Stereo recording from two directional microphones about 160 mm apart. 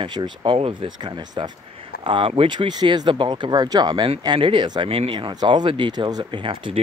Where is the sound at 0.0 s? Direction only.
25° right (ahead or behind).